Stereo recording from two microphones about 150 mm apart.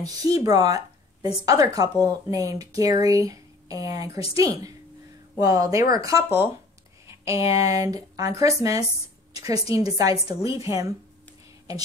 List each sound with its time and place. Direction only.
0.0 s speech: 25° right (ahead or behind)